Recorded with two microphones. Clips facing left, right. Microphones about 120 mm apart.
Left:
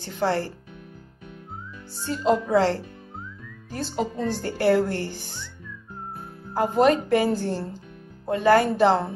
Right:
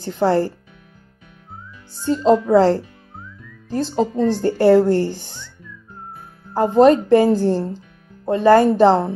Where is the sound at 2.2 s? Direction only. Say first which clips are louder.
Right 7 dB; 35° right (ahead or behind).